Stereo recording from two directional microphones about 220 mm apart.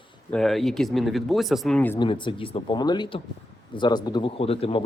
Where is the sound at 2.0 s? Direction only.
20° left (ahead or behind).